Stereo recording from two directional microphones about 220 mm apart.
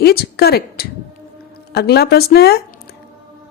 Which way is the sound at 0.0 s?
45° left (ahead or behind).